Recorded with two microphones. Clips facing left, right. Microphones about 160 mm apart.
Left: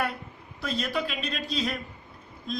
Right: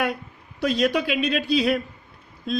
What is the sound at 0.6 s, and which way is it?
Speech, 80° right.